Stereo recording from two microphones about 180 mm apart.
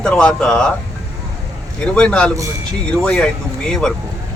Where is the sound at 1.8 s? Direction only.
5° left (ahead or behind).